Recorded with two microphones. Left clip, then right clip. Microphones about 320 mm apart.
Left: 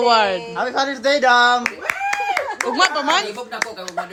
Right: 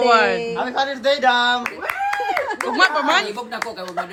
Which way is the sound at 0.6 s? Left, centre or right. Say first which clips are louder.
Left 1 dB; left.